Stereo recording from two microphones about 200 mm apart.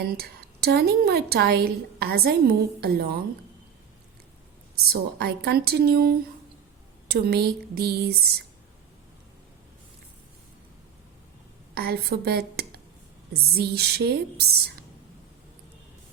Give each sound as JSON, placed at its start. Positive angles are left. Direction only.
{"t": 0.0, "sound": "a woman's voice", "side_deg": -50}
{"t": 4.9, "sound": "a woman's voice", "side_deg": -55}
{"t": 11.7, "sound": "a woman's voice", "side_deg": -50}